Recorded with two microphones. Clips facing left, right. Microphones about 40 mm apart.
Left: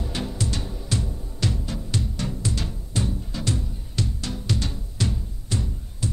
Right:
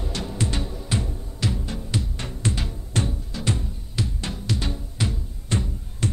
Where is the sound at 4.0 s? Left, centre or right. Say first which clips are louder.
Even; centre.